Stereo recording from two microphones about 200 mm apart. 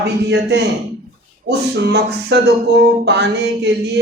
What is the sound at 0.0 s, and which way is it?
A man's voice, 55° right (ahead or behind).